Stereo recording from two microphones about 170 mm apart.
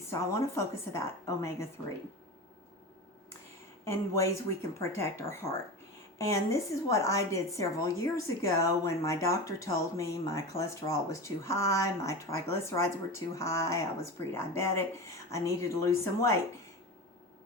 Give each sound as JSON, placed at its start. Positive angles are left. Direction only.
{"t": 0.1, "sound": "a woman's voice", "side_deg": 15}
{"t": 3.8, "sound": "a woman's voice", "side_deg": 15}